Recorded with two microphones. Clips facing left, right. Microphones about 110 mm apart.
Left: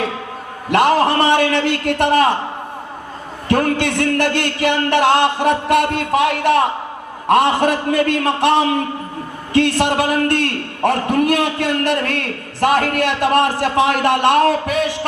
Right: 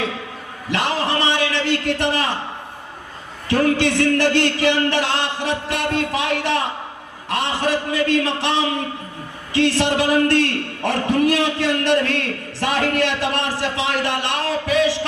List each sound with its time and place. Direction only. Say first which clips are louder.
0.7 s a man's voice: left 8 dB; 50° left (ahead or behind)
3.5 s a man's voice: left 1 dB; 50° left (ahead or behind)